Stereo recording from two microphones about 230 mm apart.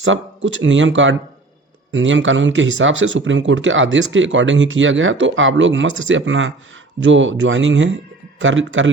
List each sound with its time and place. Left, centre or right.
0.0 s speech: right